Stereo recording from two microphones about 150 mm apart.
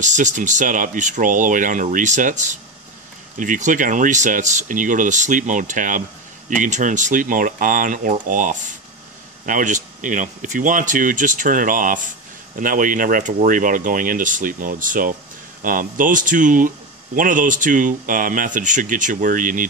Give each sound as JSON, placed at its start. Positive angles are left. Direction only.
{"t": 0.0, "sound": "speech", "side_deg": -55}